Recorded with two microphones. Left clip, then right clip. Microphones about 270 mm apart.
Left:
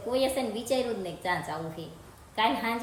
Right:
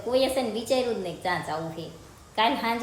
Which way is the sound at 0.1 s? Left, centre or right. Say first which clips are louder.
Right 4 dB; centre.